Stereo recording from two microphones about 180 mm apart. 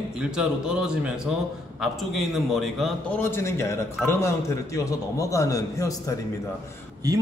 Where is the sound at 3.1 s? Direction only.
15° left (ahead or behind).